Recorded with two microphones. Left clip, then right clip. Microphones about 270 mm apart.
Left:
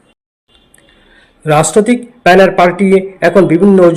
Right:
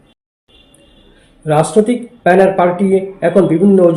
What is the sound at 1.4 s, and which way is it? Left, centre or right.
Speech, left.